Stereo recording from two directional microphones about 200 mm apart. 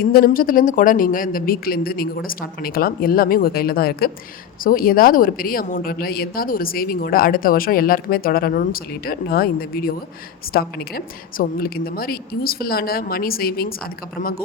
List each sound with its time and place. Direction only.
0.0 s a woman's voice: 50° left (ahead or behind)